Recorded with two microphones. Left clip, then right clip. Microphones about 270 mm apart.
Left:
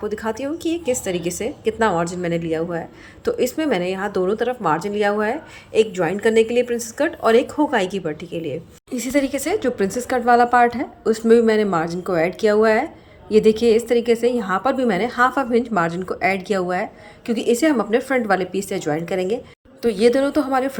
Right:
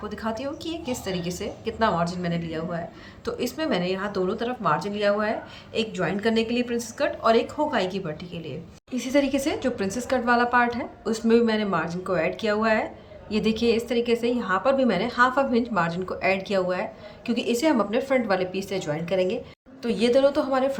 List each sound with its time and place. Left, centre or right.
0.0 s speech: centre